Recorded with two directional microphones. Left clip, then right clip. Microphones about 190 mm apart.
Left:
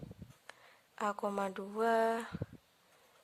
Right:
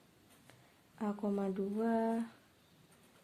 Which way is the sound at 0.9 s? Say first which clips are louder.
Left 3 dB; 45° left (ahead or behind).